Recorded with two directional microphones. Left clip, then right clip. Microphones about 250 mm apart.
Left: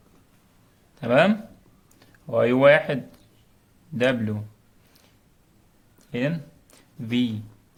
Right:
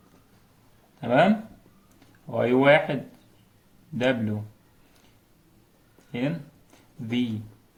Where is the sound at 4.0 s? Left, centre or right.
Left.